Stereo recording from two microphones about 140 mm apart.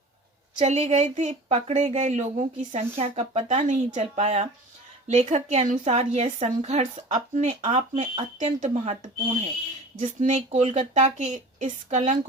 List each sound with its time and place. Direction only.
0.6 s a woman's voice: 50° right (ahead or behind)